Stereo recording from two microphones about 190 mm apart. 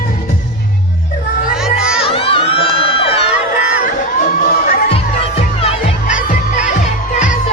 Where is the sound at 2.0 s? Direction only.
30° left (ahead or behind).